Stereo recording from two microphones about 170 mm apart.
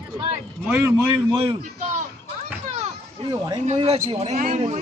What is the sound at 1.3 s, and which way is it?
Speech, 30° right (ahead or behind).